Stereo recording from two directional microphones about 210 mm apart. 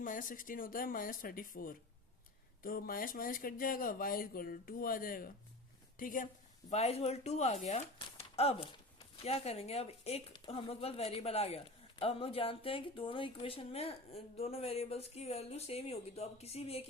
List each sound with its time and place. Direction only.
0.0 s speech: 40° left (ahead or behind)
6.7 s speech: 30° left (ahead or behind)
8.0 s a sound: 30° left (ahead or behind)
9.2 s a woman's voice: 30° left (ahead or behind)